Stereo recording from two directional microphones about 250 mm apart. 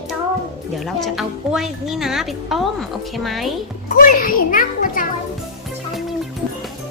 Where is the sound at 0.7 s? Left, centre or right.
Centre.